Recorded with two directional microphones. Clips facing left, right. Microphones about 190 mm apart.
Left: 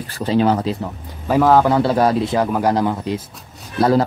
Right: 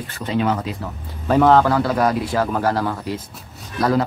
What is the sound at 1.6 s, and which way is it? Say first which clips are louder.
A man's voice: left 3 dB; 25° left (ahead or behind).